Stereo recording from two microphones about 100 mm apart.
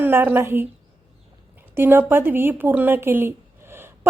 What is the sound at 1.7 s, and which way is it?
A woman's voice, 20° right (ahead or behind).